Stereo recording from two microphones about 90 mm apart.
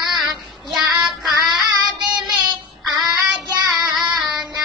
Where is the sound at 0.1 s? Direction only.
Centre (ahead or behind).